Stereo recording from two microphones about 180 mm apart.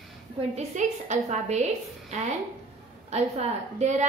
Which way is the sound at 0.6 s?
40° right (ahead or behind).